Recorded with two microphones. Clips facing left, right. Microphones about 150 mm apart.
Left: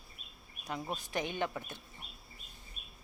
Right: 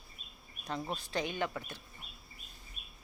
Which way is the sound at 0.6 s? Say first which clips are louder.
Right 1 dB; 10° left (ahead or behind).